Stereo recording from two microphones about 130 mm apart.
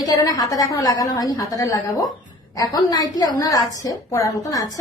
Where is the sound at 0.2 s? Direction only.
25° left (ahead or behind).